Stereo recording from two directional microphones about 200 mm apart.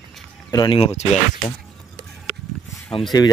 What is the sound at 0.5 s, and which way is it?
Speech, 25° left (ahead or behind).